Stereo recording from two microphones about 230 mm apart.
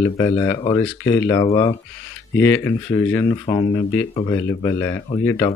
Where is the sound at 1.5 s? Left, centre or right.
Left.